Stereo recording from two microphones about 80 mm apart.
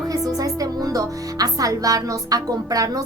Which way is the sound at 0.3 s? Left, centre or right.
Right.